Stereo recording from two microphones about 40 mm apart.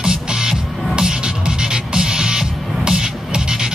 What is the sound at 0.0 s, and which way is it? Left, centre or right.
Music, centre.